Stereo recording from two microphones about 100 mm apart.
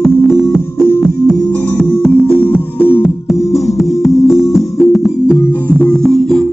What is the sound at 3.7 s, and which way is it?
Music, centre (ahead or behind).